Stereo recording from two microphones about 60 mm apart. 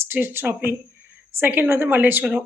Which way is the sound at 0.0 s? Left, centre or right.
Right.